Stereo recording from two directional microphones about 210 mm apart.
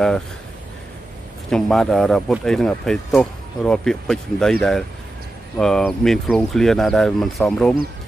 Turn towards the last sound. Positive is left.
turn(degrees=5)  # may be behind; listen again after turning